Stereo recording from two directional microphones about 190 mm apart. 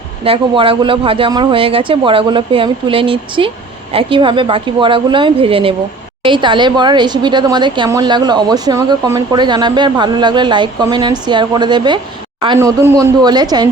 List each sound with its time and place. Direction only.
0.3 s a woman's voice: 30° right (ahead or behind)